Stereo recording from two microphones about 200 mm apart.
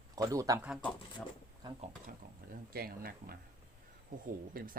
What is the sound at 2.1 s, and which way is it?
Speech, 45° right (ahead or behind).